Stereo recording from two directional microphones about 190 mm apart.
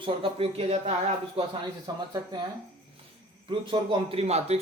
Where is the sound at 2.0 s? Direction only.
20° right (ahead or behind).